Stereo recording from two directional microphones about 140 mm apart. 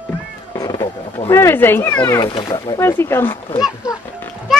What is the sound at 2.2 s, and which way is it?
Speech, 35° left (ahead or behind).